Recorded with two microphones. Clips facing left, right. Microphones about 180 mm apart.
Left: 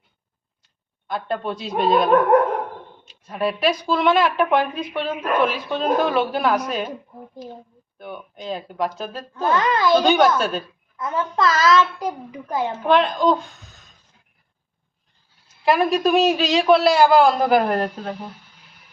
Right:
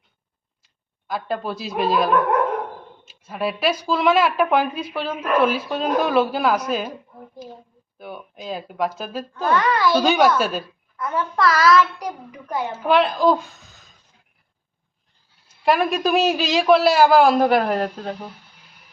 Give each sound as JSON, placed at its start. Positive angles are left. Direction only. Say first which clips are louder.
{"t": 1.0, "sound": "speech", "louder": "even", "side_deg": -5}
{"t": 7.9, "sound": "speech", "louder": "left 1 dB", "side_deg": -5}
{"t": 9.3, "sound": "a child's voice", "louder": "even", "side_deg": 25}
{"t": 10.0, "sound": "speech", "louder": "even", "side_deg": -5}
{"t": 10.9, "sound": "a child's voice", "louder": "even", "side_deg": 20}
{"t": 12.7, "sound": "speech", "louder": "right 1 dB", "side_deg": -5}
{"t": 15.6, "sound": "speech", "louder": "left 1 dB", "side_deg": 0}